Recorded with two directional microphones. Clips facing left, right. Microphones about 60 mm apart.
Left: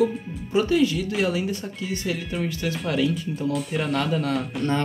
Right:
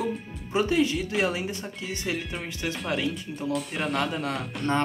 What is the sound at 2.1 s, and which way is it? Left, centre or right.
Speech, centre.